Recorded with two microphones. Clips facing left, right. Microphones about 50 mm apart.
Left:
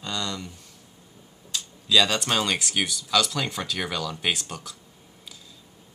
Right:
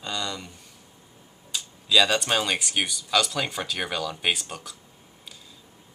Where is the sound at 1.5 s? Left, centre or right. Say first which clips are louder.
Even; centre.